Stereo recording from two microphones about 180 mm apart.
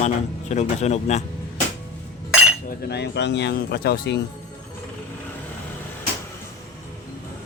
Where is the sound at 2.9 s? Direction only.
70° left (ahead or behind).